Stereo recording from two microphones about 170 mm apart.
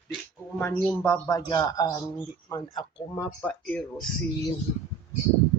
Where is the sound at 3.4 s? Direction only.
5° left (ahead or behind).